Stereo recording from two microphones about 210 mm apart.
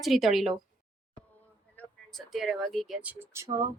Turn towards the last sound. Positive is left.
turn(degrees=-10)  # may be behind; listen again after turning